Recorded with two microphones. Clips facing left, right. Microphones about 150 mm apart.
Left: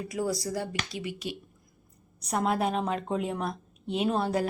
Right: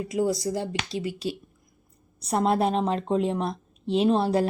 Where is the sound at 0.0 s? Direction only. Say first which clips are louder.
Right 5 dB; 20° right (ahead or behind).